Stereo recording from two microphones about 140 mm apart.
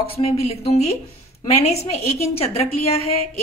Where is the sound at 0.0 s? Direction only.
45° left (ahead or behind).